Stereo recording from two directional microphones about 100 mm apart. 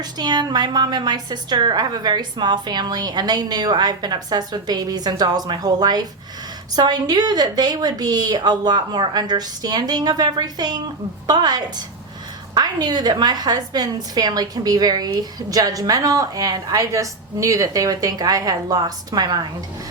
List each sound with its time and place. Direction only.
0.0 s a woman's voice: 45° right (ahead or behind)